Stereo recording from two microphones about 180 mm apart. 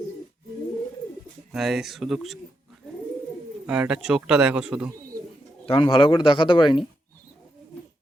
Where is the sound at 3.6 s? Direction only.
5° right (ahead or behind).